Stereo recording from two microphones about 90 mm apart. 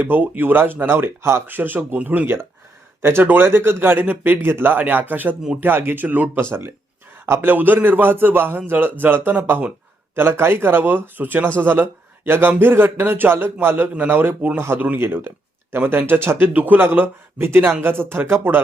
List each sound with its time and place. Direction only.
0.0 s speech: 20° right (ahead or behind)